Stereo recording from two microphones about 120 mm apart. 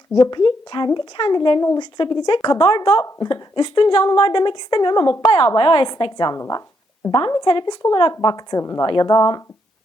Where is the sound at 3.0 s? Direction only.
35° left (ahead or behind).